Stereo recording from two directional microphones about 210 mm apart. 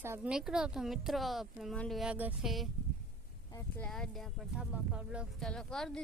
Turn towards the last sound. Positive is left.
turn(degrees=5)  # may be behind; listen again after turning